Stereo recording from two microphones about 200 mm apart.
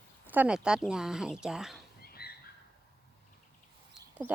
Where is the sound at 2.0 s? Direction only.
50° left (ahead or behind).